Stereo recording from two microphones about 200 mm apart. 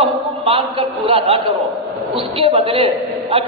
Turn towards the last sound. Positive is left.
turn(degrees=-30)  # may be behind; listen again after turning